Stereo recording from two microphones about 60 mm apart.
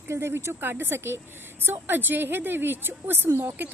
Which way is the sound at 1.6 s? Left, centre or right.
Right.